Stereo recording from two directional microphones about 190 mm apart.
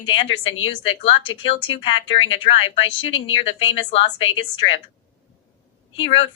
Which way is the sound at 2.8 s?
90° left.